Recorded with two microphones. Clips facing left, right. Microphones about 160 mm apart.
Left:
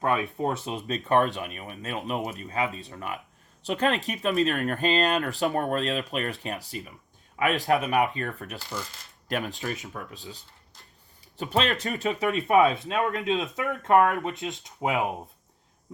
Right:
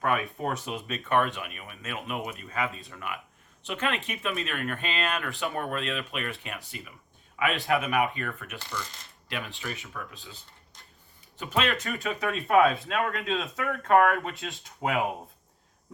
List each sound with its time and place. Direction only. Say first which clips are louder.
0.0 s speech: left 2 dB; 25° left (ahead or behind); by 10.3 s 40° left (ahead or behind)
11.3 s speech: left 2 dB; 35° left (ahead or behind)
12.2 s speech: left 1 dB; 20° left (ahead or behind)